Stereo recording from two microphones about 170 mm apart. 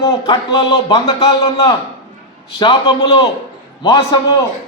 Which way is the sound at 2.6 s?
25° left (ahead or behind).